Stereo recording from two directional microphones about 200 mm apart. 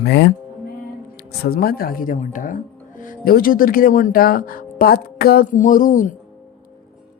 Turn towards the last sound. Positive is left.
turn(degrees=40)  # may be behind; listen again after turning